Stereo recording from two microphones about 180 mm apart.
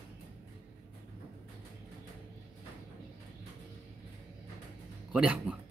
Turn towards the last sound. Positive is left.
turn(degrees=-5)  # may be behind; listen again after turning